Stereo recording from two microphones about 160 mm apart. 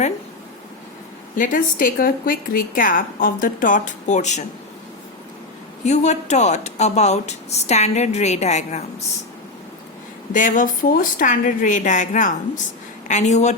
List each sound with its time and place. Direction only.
1.4 s speech: 55° left (ahead or behind)
5.8 s speech: 45° left (ahead or behind)
10.3 s speech: 55° left (ahead or behind)